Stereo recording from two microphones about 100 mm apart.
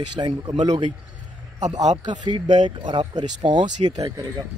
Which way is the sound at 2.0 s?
50° right (ahead or behind).